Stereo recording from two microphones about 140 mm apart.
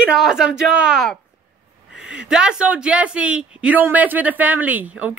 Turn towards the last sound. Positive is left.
turn(degrees=-10)  # may be behind; listen again after turning